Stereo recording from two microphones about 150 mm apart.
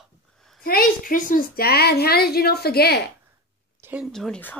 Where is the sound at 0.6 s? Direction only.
80° left.